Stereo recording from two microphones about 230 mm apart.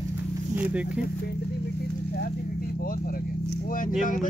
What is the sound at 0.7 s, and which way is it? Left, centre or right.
Speech, centre.